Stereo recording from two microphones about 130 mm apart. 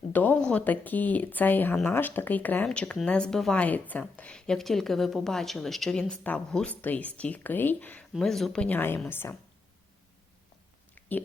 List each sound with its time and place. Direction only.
0.1 s speech: 15° left (ahead or behind)
8.1 s speech: 5° left (ahead or behind)